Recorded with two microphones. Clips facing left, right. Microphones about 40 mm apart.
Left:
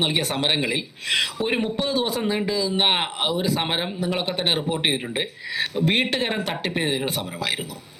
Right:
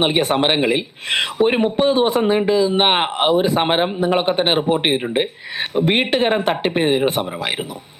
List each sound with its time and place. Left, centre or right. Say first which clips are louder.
0.0 s a man's voice: right 7 dB; right